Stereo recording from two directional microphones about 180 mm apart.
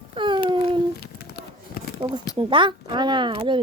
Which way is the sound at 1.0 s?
60° left (ahead or behind).